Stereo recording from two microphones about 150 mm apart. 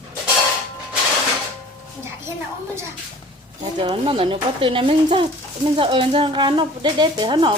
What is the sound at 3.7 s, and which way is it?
A woman's voice, 35° right (ahead or behind).